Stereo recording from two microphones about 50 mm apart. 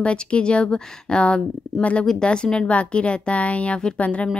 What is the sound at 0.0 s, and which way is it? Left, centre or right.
A woman's voice, left.